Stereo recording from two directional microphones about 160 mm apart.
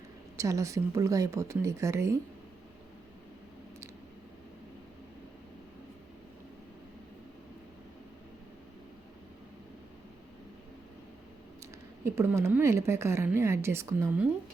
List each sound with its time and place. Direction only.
0.3 s speech: 20° right (ahead or behind)
12.0 s a woman's voice: 15° right (ahead or behind)